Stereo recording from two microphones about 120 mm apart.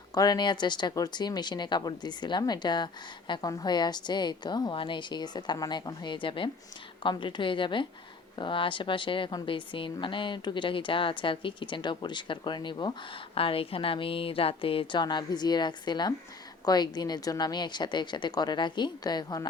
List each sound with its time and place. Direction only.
0.1 s a woman's voice: 35° left (ahead or behind); by 15.0 s 50° left (ahead or behind)
15.0 s speech: 35° left (ahead or behind)